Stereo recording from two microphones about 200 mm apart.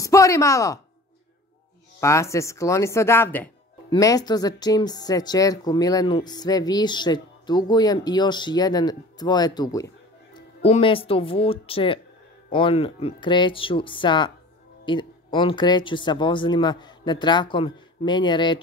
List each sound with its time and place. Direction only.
0.0 s speech: 15° left (ahead or behind)
2.0 s a woman's voice: 15° left (ahead or behind)